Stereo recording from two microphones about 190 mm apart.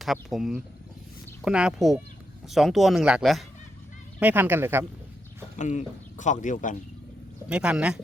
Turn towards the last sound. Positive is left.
turn(degrees=-5)  # may be behind; listen again after turning